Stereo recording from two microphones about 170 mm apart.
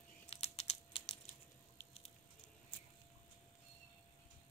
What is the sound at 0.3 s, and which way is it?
Computer keyboard, 35° left (ahead or behind).